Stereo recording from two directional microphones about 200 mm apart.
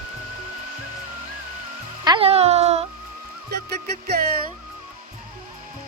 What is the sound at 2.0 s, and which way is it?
Speech, 25° right (ahead or behind).